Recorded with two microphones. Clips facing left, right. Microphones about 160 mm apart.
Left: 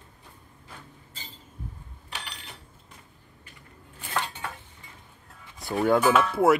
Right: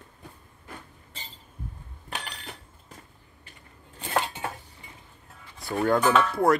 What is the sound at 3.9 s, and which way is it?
Dishes, 30° right (ahead or behind).